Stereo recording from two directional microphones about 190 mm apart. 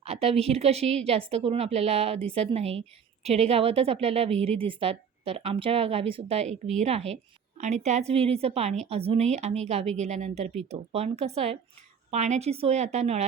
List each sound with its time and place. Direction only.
0.0 s a woman's voice: 35° right (ahead or behind)